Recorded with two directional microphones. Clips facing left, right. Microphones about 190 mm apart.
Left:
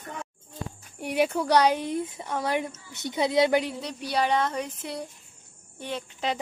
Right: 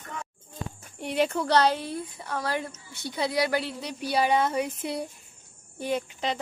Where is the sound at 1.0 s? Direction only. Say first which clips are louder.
Left 1 dB; 10° left (ahead or behind).